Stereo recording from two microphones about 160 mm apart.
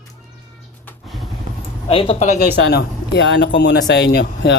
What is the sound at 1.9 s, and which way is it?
Speech, 35° left (ahead or behind).